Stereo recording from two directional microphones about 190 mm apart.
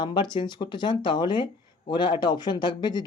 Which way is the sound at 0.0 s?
25° left (ahead or behind).